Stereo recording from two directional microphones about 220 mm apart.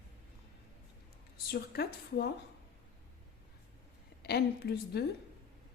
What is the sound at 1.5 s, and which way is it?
Speech, 45° left (ahead or behind).